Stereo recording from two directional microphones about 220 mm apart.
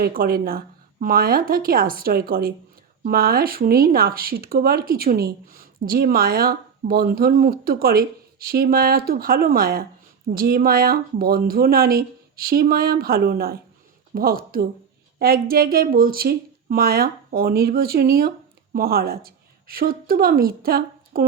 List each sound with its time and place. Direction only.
0.0 s speech: 45° right (ahead or behind)